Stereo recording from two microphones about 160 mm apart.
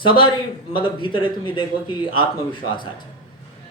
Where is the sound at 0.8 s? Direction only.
30° left (ahead or behind).